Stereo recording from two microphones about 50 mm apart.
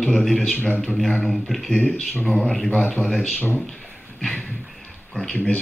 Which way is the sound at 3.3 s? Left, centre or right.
Left.